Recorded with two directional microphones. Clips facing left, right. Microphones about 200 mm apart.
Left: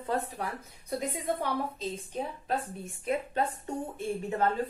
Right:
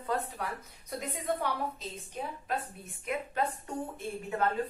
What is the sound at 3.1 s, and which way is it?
Speech, 30° left (ahead or behind).